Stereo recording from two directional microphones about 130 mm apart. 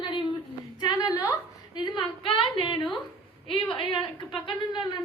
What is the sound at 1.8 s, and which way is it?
A woman's voice, 40° left (ahead or behind).